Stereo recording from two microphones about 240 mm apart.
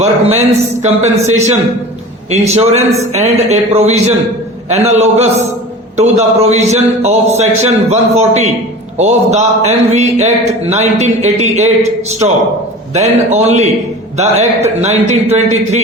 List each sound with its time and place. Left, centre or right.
0.0 s a man's voice: right